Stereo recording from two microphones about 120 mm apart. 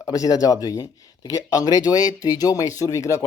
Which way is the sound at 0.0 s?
30° left (ahead or behind).